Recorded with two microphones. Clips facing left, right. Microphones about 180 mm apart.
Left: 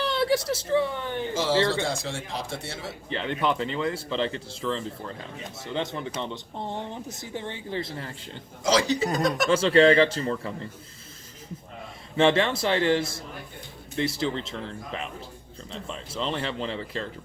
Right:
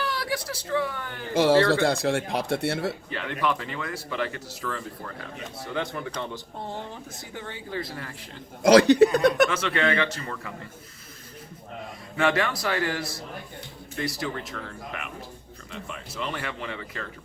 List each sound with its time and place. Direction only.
0.0 s a woman's voice: 25° left (ahead or behind)
1.3 s speech: 65° right (ahead or behind)
3.1 s speech: 25° left (ahead or behind)
8.2 s speech: 65° right (ahead or behind)
9.5 s speech: 30° left (ahead or behind)
12.1 s speech: 25° left (ahead or behind)